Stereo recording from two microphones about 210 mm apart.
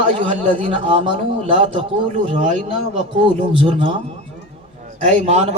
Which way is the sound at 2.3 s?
35° right (ahead or behind).